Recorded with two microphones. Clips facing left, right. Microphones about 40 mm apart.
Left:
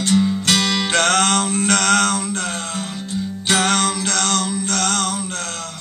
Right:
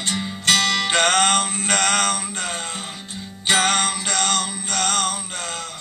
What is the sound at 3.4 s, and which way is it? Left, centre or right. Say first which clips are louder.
Music: left 1 dB; centre.